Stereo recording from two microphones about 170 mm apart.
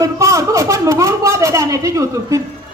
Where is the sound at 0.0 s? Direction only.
20° right (ahead or behind).